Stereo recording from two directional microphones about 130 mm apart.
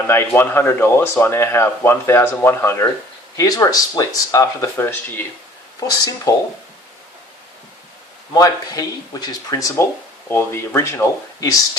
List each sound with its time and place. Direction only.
0.1 s speech: 20° left (ahead or behind)
8.3 s speech: 30° left (ahead or behind)